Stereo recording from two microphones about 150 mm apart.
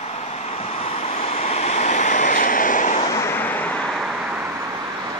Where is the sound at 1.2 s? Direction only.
45° left (ahead or behind).